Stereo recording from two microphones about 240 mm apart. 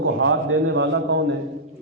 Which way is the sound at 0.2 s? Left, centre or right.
Right.